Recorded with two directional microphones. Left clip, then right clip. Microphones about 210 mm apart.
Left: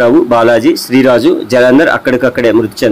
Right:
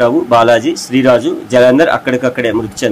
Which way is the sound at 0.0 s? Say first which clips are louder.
Left 2 dB; 20° left (ahead or behind).